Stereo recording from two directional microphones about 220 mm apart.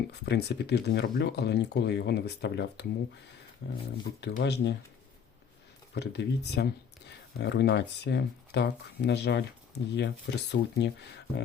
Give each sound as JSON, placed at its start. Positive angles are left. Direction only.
{"t": 0.1, "sound": "speech", "side_deg": 50}
{"t": 5.9, "sound": "speech", "side_deg": 50}